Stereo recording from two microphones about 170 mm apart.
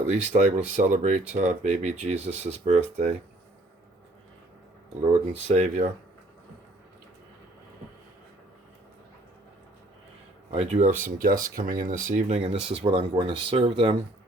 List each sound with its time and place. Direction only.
0.1 s speech: 45° right (ahead or behind)
5.3 s speech: 40° right (ahead or behind)
10.5 s speech: 40° right (ahead or behind)